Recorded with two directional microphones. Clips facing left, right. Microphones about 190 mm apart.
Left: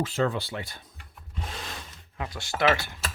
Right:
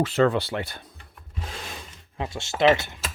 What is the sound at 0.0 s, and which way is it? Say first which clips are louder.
Speech: right 6 dB; 70° right (ahead or behind).